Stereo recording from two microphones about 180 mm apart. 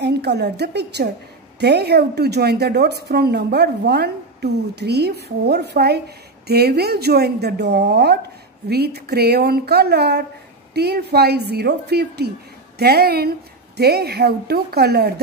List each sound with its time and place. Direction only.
0.0 s a woman's voice: 65° right (ahead or behind)